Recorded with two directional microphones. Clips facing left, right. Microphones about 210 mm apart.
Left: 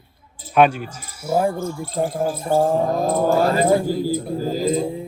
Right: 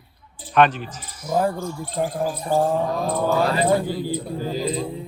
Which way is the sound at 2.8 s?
45° left (ahead or behind).